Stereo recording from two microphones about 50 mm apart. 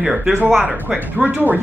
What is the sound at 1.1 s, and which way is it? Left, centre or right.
Speech, right.